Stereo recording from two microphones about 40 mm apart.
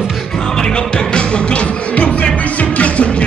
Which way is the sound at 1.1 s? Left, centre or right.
Left.